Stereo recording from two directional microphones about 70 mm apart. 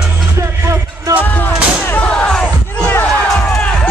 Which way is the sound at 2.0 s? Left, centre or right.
Centre.